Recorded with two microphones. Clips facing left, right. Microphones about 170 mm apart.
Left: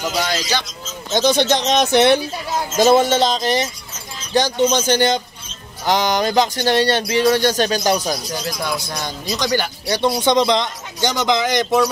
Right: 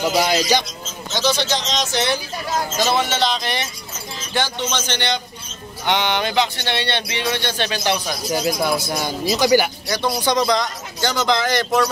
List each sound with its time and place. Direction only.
0.0 s speech: 10° right (ahead or behind)
1.1 s speech: 55° left (ahead or behind)
2.8 s speech: 45° left (ahead or behind)
8.3 s speech: 10° right (ahead or behind)
9.8 s speech: 30° left (ahead or behind)